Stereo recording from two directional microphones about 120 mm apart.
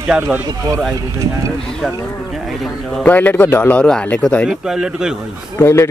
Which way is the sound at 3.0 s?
15° left (ahead or behind).